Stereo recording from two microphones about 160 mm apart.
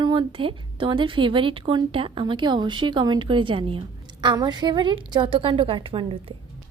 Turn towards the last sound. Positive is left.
turn(degrees=-30)  # may be behind; listen again after turning